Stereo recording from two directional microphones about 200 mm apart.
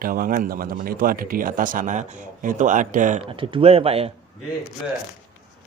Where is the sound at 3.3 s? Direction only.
25° right (ahead or behind).